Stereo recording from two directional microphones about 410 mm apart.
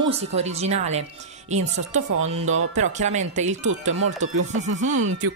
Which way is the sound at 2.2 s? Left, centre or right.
Centre.